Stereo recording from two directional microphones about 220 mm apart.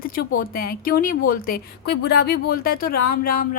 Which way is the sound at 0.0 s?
40° left (ahead or behind).